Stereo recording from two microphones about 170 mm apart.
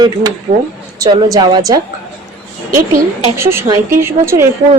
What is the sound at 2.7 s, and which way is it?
Speech, 55° right (ahead or behind).